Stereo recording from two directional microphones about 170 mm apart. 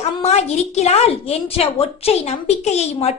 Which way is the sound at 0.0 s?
40° left (ahead or behind).